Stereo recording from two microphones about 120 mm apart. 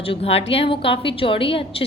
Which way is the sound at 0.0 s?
55° left (ahead or behind).